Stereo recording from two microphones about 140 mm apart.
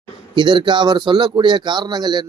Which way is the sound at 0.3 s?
35° right (ahead or behind).